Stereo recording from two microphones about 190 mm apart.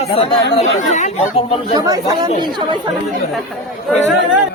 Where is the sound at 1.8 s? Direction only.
20° right (ahead or behind).